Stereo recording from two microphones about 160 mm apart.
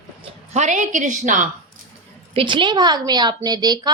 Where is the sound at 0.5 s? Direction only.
50° right (ahead or behind).